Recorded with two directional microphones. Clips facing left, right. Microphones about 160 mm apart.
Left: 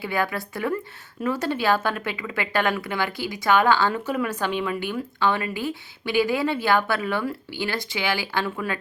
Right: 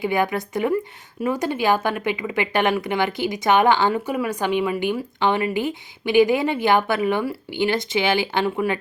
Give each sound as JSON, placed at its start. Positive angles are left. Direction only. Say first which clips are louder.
{"t": 0.0, "sound": "speech", "louder": "right 5 dB", "side_deg": -20}